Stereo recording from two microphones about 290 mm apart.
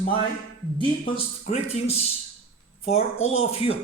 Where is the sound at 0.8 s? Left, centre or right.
Left.